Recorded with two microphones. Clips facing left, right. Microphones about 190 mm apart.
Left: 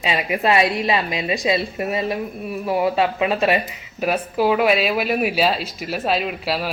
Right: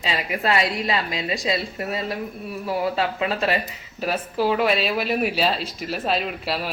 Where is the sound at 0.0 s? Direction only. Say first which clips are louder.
Left 4 dB; 20° left (ahead or behind).